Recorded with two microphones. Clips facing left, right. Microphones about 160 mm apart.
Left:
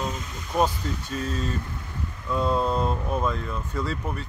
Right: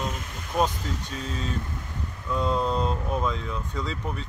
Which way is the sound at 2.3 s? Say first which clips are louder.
Left 1 dB; 5° left (ahead or behind).